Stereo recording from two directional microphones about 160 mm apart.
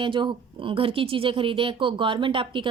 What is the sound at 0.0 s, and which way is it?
Speech, 30° right (ahead or behind).